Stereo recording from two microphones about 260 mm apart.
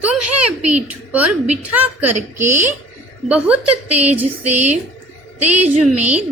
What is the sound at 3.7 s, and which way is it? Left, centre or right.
Speech, right.